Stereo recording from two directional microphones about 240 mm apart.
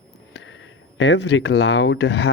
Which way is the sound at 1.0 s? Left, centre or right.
Left.